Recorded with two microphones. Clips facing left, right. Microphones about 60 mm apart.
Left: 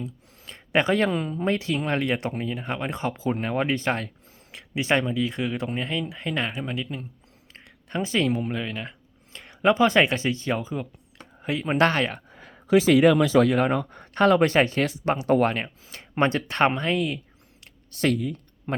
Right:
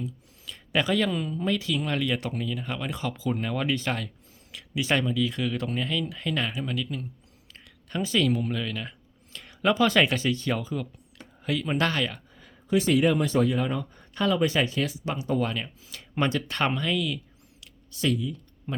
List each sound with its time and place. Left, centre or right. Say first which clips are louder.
0.0 s speech: even; left
12.6 s speech: left 5 dB; left
15.2 s speech: left 6 dB; left
17.6 s a sound: left 4 dB; left